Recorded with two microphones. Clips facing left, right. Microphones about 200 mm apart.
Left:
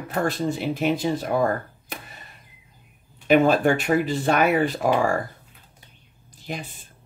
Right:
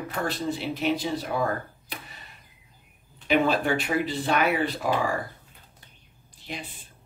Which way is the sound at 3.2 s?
50° left (ahead or behind).